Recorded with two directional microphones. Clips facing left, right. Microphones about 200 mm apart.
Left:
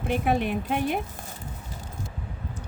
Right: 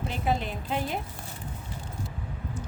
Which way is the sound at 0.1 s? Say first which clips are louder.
Left 6 dB; 60° left (ahead or behind).